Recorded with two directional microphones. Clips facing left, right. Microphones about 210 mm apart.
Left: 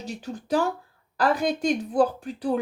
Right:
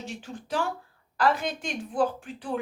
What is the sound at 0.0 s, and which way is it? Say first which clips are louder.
Speech: left 4 dB; 40° left (ahead or behind).